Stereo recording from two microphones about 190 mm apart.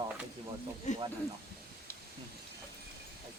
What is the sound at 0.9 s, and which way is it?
Speech, 40° left (ahead or behind).